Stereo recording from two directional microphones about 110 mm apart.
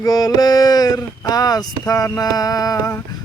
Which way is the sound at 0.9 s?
35° left (ahead or behind).